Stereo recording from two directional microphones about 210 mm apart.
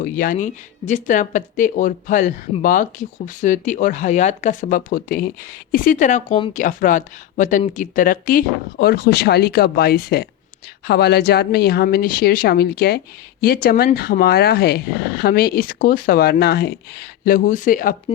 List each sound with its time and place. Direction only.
0.0 s speech: 40° left (ahead or behind)